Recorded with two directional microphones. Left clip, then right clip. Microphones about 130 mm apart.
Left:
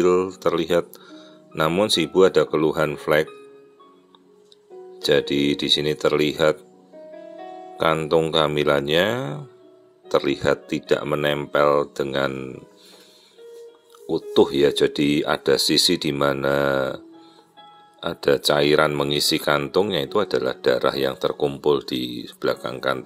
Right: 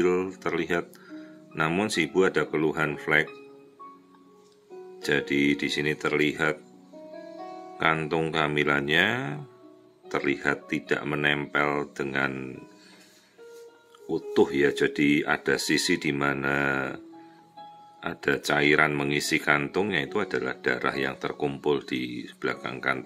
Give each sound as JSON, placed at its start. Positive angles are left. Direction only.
{"t": 0.0, "sound": "speech", "side_deg": 35}
{"t": 4.9, "sound": "speech", "side_deg": 30}
{"t": 7.7, "sound": "speech", "side_deg": 30}
{"t": 14.0, "sound": "speech", "side_deg": 35}
{"t": 18.1, "sound": "speech", "side_deg": 30}